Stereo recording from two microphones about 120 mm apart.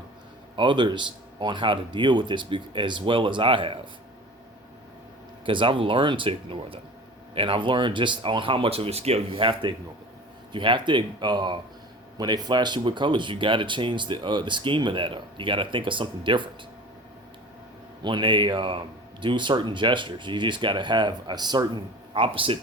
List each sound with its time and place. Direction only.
0.5 s speech: 40° right (ahead or behind)
5.5 s speech: 45° right (ahead or behind)
18.0 s speech: 40° right (ahead or behind)
22.1 s speech: 45° right (ahead or behind)